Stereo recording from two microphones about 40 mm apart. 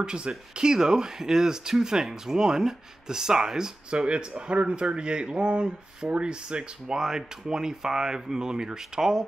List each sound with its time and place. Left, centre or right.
0.0 s speech: right
7.0 s speech: centre